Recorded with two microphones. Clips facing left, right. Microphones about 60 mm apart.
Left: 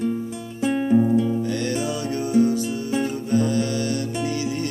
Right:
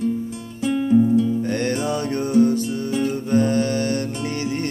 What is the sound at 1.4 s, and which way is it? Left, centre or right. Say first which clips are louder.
Music: right 2 dB; right.